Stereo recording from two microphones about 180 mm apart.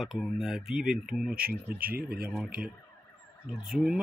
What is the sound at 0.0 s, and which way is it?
Speech, centre (ahead or behind).